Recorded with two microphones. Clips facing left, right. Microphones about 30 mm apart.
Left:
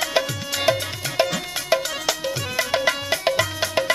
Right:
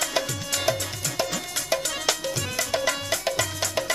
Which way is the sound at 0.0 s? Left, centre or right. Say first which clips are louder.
Left 4 dB; centre.